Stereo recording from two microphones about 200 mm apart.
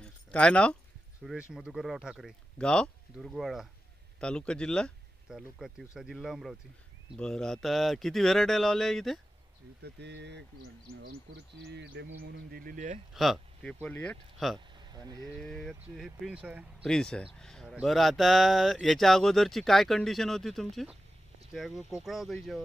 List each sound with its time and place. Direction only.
0.0 s a sound: 5° left (ahead or behind)
1.2 s speech: 5° right (ahead or behind)
9.8 s speech: 55° right (ahead or behind); by 13.0 s 40° right (ahead or behind)
13.1 s speech: centre (ahead or behind)
14.8 s a sound: 20° right (ahead or behind)
15.4 s speech: centre (ahead or behind)
16.8 s speech: 5° left (ahead or behind)